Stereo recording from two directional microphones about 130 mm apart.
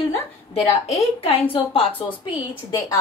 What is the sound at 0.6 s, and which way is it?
Speech, 50° left (ahead or behind).